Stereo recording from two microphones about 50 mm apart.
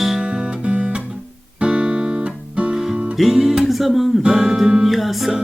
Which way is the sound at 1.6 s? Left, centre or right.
Centre.